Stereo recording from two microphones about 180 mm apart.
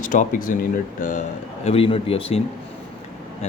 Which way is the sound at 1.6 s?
30° left (ahead or behind).